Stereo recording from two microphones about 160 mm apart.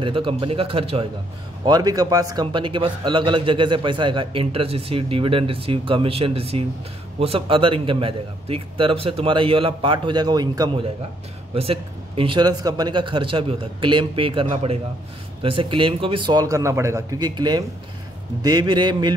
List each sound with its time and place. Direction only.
0.0 s a man's voice: 35° right (ahead or behind)
1.7 s a man's voice: 25° right (ahead or behind)